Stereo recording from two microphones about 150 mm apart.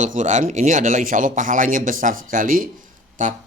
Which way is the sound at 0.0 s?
55° right (ahead or behind).